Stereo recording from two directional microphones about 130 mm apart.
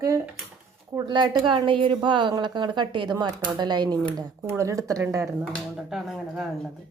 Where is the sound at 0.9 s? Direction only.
35° right (ahead or behind).